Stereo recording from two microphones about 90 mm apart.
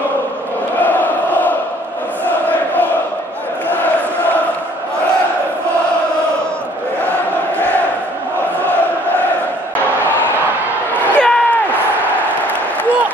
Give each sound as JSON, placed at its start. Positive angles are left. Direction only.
{"t": 0.7, "sound": "chant", "side_deg": 20}
{"t": 2.4, "sound": "crowd", "side_deg": 20}
{"t": 3.6, "sound": "chant", "side_deg": 20}
{"t": 7.1, "sound": "chant", "side_deg": 15}
{"t": 11.1, "sound": "a sound", "side_deg": 10}